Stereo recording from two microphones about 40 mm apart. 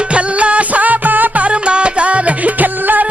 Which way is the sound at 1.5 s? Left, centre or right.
Right.